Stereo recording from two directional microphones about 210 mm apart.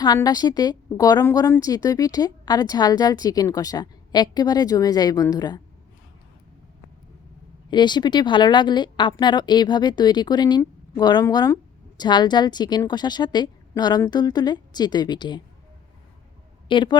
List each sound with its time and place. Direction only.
0.0 s a woman's voice: 20° left (ahead or behind)
7.7 s speech: 20° left (ahead or behind)
16.6 s speech: 20° left (ahead or behind)